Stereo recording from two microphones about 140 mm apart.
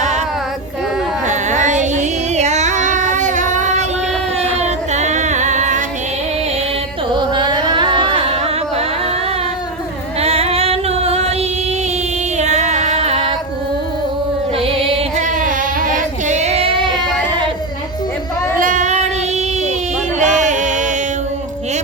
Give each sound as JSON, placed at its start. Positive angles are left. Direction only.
{"t": 1.3, "sound": "child singing", "side_deg": -60}
{"t": 4.6, "sound": "female singing", "side_deg": -55}
{"t": 7.1, "sound": "carnatic music", "side_deg": -35}
{"t": 10.2, "sound": "music", "side_deg": -45}
{"t": 12.4, "sound": "music", "side_deg": -55}
{"t": 14.5, "sound": "music", "side_deg": -40}
{"t": 15.2, "sound": "child singing", "side_deg": -65}
{"t": 18.6, "sound": "child singing", "side_deg": -65}
{"t": 20.1, "sound": "music", "side_deg": -60}